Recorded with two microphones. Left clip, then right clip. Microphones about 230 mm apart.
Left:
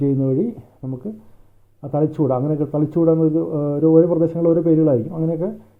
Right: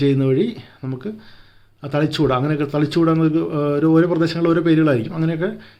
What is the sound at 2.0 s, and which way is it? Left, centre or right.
Speech, right.